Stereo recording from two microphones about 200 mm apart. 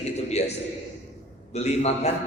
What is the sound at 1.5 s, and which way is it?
Speech, 35° left (ahead or behind).